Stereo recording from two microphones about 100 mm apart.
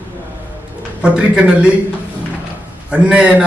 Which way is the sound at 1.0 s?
10° right (ahead or behind).